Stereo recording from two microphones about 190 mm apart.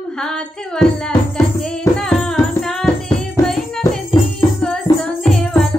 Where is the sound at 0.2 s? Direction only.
5° left (ahead or behind).